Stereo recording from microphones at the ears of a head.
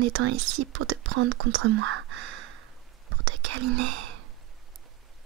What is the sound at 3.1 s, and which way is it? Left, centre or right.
Whispering, right.